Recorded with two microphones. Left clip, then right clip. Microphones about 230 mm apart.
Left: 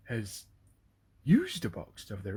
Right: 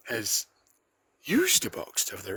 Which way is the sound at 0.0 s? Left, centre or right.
Right.